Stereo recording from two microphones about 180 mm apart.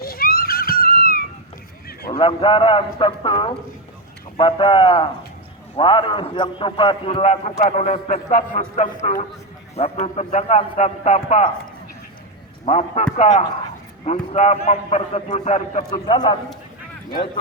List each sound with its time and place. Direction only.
0.0 s screaming: 55° left (ahead or behind)
2.1 s a man's voice: 30° left (ahead or behind)
12.6 s a man's voice: 35° left (ahead or behind)
16.0 s a man's voice: 25° left (ahead or behind)